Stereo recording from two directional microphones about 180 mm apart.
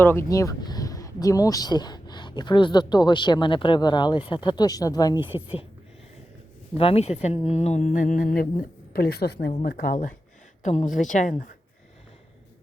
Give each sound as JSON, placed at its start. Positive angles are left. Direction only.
{"t": 0.0, "sound": "speech", "side_deg": 15}
{"t": 6.7, "sound": "speech", "side_deg": 30}